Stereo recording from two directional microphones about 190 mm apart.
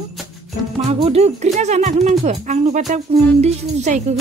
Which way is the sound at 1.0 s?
35° right (ahead or behind).